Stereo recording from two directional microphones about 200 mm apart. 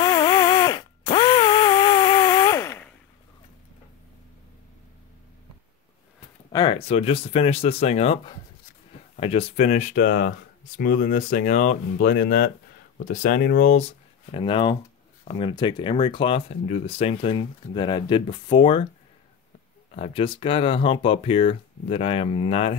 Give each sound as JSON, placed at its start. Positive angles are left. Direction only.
{"t": 0.0, "sound": "a sound", "side_deg": 20}
{"t": 6.5, "sound": "speech", "side_deg": 25}
{"t": 20.0, "sound": "speech", "side_deg": 25}